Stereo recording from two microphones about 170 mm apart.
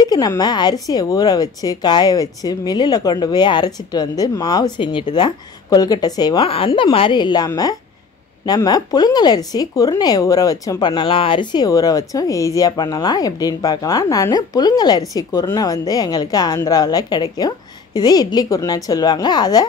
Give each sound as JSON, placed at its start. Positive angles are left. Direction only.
{"t": 0.0, "sound": "speech", "side_deg": 25}